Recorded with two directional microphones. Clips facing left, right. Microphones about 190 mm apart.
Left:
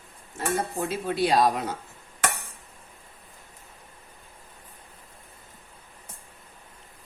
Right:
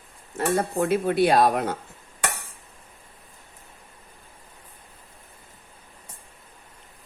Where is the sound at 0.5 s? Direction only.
60° right (ahead or behind).